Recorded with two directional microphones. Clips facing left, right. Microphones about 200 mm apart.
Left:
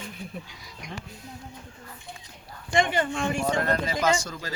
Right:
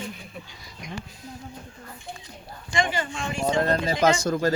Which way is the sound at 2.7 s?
55° left (ahead or behind).